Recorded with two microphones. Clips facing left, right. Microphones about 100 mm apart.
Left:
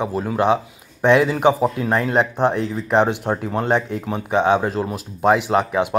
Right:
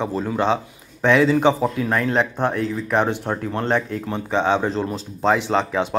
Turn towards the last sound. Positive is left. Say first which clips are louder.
# left 2 dB
turn(degrees=15)  # may be behind; listen again after turning